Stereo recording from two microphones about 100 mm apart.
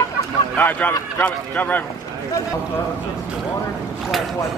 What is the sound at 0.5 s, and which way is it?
A man's voice, 15° left (ahead or behind).